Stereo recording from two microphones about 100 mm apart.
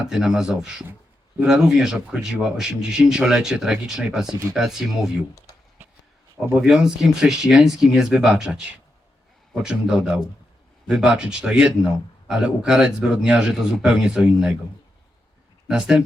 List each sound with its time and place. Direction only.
0.0 s a man's voice: 5° right (ahead or behind)
4.3 s speech: 30° right (ahead or behind)
4.5 s speech: 5° right (ahead or behind)
6.6 s speech: 5° right (ahead or behind)
9.6 s a man's voice: 10° right (ahead or behind)
15.6 s a man's voice: 5° right (ahead or behind)